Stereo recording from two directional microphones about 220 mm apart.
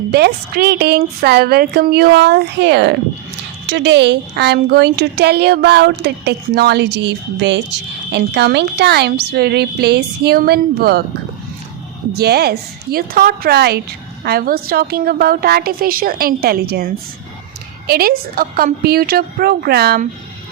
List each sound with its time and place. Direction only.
0.1 s speech: 50° right (ahead or behind)
12.1 s speech: 45° right (ahead or behind)